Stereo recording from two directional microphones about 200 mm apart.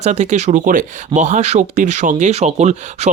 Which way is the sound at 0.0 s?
35° right (ahead or behind).